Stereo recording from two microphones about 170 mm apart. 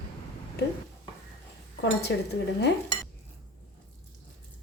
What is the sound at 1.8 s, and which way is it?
Speech, 80° left.